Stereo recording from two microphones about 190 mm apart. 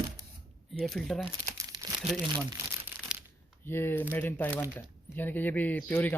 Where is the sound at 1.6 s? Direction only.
15° right (ahead or behind).